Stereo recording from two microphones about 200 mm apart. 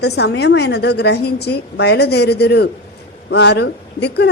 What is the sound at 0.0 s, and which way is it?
A woman's voice, 55° left (ahead or behind).